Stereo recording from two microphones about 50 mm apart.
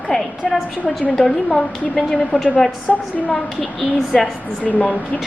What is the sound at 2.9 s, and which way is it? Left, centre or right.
Speech, centre.